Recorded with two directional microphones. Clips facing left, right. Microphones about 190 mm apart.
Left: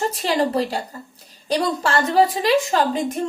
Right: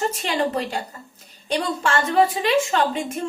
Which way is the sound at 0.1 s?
35° left (ahead or behind).